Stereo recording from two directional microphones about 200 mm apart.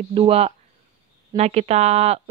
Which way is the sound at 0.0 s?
30° right (ahead or behind).